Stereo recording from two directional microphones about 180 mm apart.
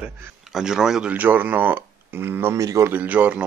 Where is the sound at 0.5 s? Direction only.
5° right (ahead or behind).